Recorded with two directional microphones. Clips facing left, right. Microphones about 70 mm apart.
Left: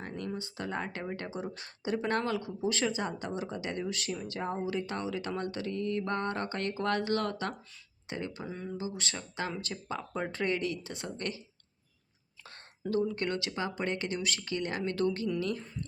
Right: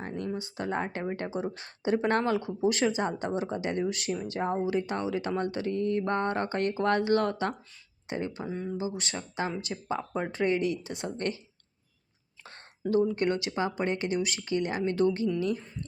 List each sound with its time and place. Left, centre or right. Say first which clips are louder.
0.0 s a sound: right 4 dB; right
0.3 s speech: right 6 dB; right
12.9 s speech: right 5 dB; right